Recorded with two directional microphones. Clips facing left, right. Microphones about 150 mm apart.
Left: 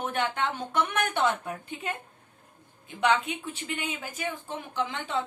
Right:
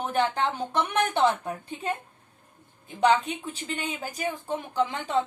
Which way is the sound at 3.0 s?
35° right (ahead or behind).